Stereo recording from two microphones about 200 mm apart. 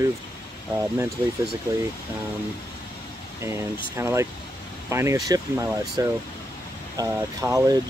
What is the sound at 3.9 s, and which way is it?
Speech, 15° right (ahead or behind).